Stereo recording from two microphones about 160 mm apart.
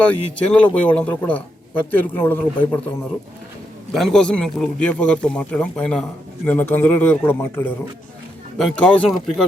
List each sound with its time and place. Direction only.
0.0 s speech: 10° left (ahead or behind)
3.9 s speech: 5° left (ahead or behind)